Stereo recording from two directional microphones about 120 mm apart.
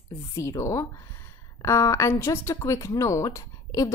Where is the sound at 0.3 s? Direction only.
25° left (ahead or behind).